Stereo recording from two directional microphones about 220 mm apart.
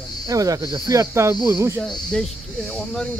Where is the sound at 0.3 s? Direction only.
15° right (ahead or behind).